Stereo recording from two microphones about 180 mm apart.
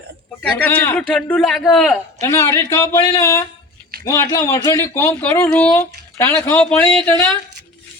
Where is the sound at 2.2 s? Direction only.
15° left (ahead or behind).